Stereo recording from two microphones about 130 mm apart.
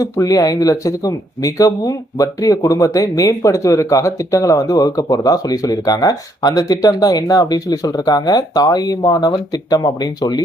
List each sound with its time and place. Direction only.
0.0 s speech: 25° left (ahead or behind)